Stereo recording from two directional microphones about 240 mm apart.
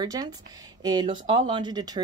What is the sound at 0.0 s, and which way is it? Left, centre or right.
Speech, centre.